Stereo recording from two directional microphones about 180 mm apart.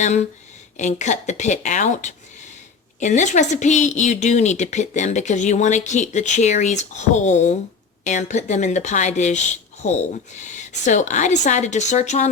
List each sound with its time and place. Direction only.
0.0 s a woman's voice: 40° left (ahead or behind)